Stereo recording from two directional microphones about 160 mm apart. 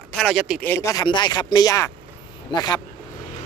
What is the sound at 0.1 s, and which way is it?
Speech, centre (ahead or behind).